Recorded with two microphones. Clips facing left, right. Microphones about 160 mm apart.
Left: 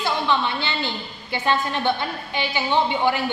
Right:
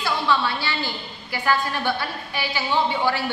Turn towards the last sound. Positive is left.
turn(degrees=20)  # may be behind; listen again after turning